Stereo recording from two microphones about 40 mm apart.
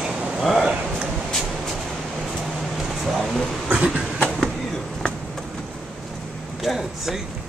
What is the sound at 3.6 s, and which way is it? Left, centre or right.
Train, right.